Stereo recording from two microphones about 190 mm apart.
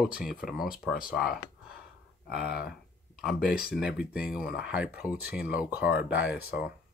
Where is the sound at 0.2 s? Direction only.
Centre (ahead or behind).